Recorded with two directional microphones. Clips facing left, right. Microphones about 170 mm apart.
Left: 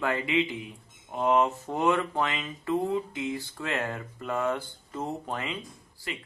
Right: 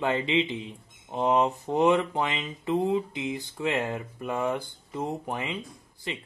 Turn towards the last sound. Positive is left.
turn(degrees=-25)  # may be behind; listen again after turning